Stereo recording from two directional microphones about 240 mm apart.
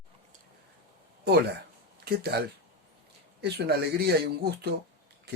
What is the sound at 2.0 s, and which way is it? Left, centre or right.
Speech, right.